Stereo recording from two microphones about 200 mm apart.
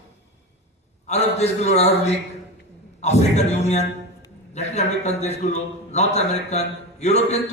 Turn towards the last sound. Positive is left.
turn(degrees=35)  # may be behind; listen again after turning